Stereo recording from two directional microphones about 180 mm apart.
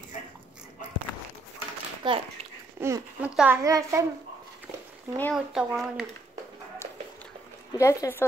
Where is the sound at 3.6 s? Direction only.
20° right (ahead or behind).